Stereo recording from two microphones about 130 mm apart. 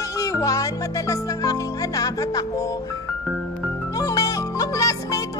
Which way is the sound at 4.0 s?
25° left (ahead or behind).